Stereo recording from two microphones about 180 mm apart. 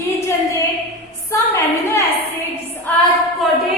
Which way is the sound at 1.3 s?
15° left (ahead or behind).